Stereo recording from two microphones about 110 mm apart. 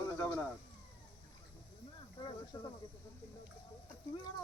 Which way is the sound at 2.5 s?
50° left (ahead or behind).